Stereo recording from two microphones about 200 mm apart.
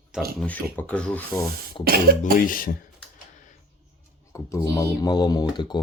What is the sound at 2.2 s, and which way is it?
Speech, 45° left (ahead or behind).